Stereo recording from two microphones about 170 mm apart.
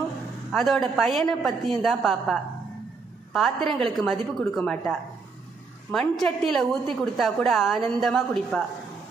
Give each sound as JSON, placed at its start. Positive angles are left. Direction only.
{"t": 0.5, "sound": "a woman's voice", "side_deg": 0}
{"t": 3.3, "sound": "a woman's voice", "side_deg": 0}